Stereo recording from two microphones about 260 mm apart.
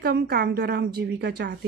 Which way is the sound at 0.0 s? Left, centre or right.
Right.